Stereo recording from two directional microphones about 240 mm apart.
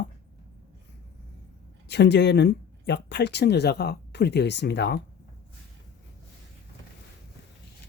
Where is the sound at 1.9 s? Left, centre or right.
Left.